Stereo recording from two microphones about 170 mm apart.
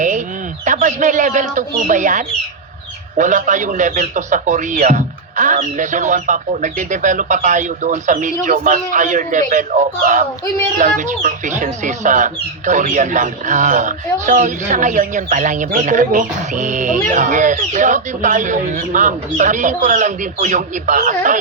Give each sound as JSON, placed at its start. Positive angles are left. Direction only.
{"t": 0.6, "sound": "speech", "side_deg": -45}